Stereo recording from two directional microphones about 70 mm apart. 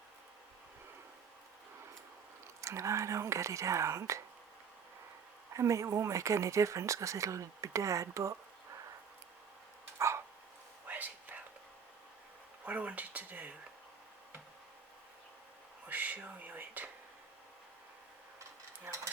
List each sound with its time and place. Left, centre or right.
2.6 s speech: right
5.5 s speech: right
10.8 s whispering: right
12.6 s speech: right
15.9 s whispering: right
18.9 s stir: right